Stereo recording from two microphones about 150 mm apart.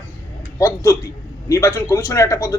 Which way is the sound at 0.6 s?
20° left (ahead or behind).